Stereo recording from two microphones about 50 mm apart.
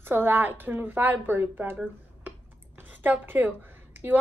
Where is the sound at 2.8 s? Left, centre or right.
Right.